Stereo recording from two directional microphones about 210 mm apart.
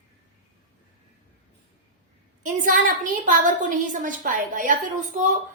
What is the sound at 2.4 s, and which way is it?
A woman's voice, 40° right (ahead or behind).